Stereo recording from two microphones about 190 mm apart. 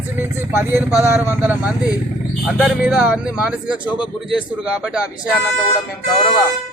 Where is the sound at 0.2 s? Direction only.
10° right (ahead or behind).